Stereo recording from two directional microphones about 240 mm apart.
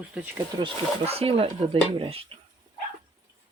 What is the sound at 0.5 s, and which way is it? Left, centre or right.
Speech, right.